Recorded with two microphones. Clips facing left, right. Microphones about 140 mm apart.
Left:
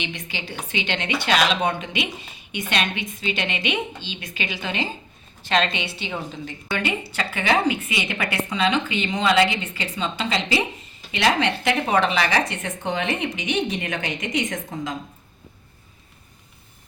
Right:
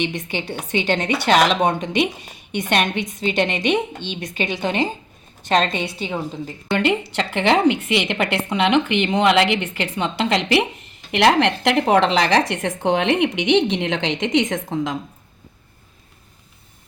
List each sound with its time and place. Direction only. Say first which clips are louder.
0.5 s a woman's voice: right 7 dB; 50° right (ahead or behind); by 6.7 s 35° right (ahead or behind)
7.1 s a woman's voice: right 4 dB; 75° right (ahead or behind)
8.0 s a woman's voice: right 6 dB; 25° right (ahead or behind)
8.3 s a woman's voice: right 3 dB; 70° right (ahead or behind)